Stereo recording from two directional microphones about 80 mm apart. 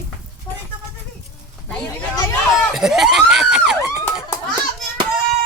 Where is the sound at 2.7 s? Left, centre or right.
Centre.